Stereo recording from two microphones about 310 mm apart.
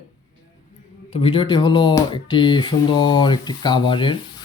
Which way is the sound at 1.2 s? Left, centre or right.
Centre.